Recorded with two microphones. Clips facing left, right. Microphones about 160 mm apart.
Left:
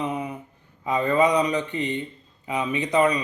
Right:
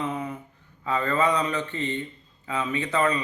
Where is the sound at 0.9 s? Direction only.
15° left (ahead or behind).